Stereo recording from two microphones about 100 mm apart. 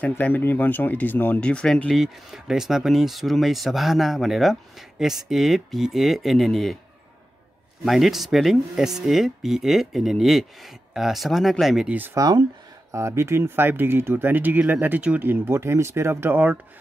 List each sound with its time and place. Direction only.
0.1 s speech: 20° left (ahead or behind); by 6.8 s centre (ahead or behind)
7.8 s speech: centre (ahead or behind)
11.9 s speech: 20° right (ahead or behind)
12.2 s speech: 45° right (ahead or behind)
12.9 s speech: 30° right (ahead or behind)